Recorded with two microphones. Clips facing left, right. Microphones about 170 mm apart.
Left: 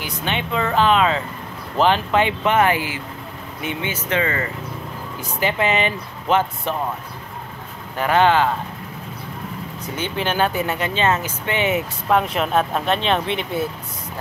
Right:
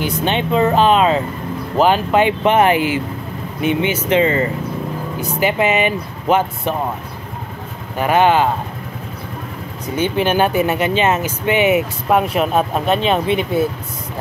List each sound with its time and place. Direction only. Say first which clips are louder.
0.0 s speech: right 7 dB; 25° right (ahead or behind)
5.4 s speech: right 4 dB; 15° right (ahead or behind)
8.0 s speech: right 3 dB; 15° right (ahead or behind)
9.9 s speech: right 6 dB; 15° right (ahead or behind)